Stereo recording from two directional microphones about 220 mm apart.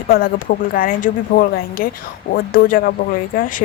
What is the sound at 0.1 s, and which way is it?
Speech, 45° left (ahead or behind).